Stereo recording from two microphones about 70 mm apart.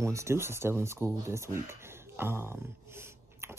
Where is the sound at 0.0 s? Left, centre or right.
Right.